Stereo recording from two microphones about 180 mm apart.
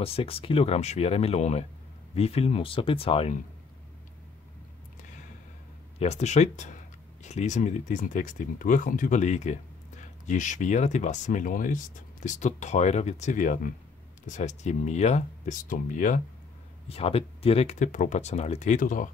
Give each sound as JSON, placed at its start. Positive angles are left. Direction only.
{"t": 0.0, "sound": "speech", "side_deg": 30}
{"t": 5.9, "sound": "speech", "side_deg": 35}
{"t": 16.9, "sound": "speech", "side_deg": 35}